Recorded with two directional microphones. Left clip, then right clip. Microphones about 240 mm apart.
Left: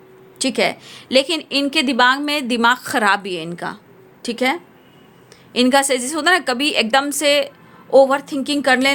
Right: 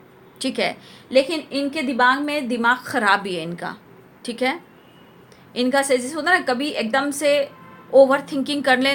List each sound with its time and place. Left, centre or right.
0.3 s a woman's voice: left